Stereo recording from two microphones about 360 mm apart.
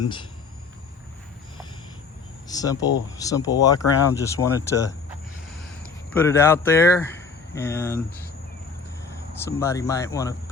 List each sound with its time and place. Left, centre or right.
0.0 s speech: centre
2.5 s speech: centre
6.1 s speech: centre
9.5 s speech: centre